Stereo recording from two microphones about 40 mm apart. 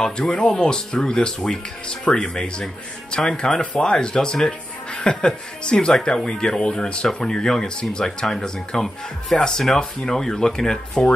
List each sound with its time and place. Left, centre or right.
0.0 s speech: centre